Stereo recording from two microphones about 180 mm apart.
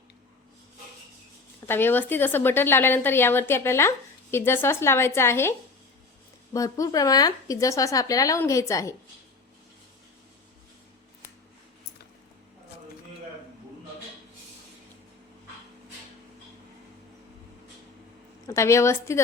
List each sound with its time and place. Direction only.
1.6 s a woman's voice: 10° left (ahead or behind)
18.4 s a woman's voice: 15° left (ahead or behind)